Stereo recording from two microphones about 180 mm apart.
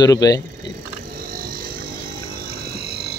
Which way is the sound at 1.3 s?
55° right (ahead or behind).